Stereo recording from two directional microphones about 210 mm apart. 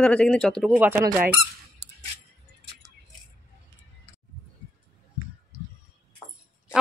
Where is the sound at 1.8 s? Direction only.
55° right (ahead or behind).